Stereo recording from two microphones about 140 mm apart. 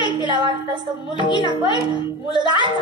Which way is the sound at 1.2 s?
35° left (ahead or behind).